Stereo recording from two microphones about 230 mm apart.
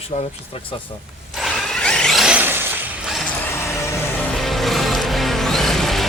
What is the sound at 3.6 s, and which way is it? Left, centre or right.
Music, centre.